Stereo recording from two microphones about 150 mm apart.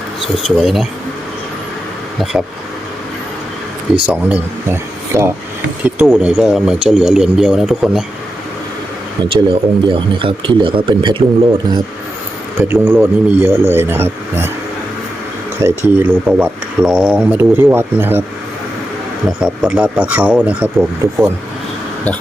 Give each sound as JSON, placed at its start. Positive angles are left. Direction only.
{"t": 0.2, "sound": "speech", "side_deg": 0}
{"t": 4.0, "sound": "speech", "side_deg": -10}
{"t": 6.1, "sound": "speech", "side_deg": -5}
{"t": 9.3, "sound": "speech", "side_deg": -35}
{"t": 12.5, "sound": "speech", "side_deg": -15}
{"t": 15.6, "sound": "speech", "side_deg": -15}
{"t": 19.4, "sound": "speech", "side_deg": -5}